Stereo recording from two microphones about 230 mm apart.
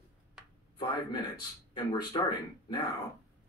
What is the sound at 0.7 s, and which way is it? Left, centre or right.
A man's voice, centre.